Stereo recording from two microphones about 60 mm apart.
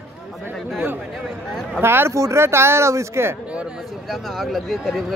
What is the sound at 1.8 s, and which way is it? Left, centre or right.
Speech, right.